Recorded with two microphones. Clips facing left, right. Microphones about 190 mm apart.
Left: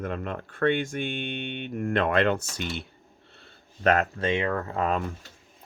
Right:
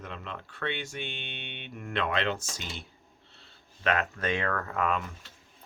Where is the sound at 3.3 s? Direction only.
50° left (ahead or behind); by 5.1 s 35° left (ahead or behind).